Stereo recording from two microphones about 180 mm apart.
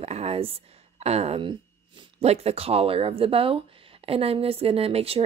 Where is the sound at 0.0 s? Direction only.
35° right (ahead or behind).